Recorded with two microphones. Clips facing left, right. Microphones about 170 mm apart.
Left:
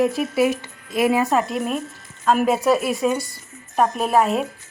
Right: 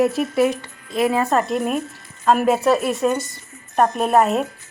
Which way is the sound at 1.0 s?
15° left (ahead or behind).